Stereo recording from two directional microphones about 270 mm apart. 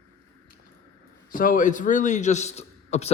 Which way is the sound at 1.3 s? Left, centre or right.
Left.